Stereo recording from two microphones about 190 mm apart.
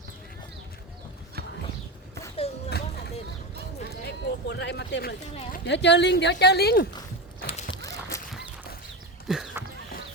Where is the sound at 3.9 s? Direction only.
60° left (ahead or behind).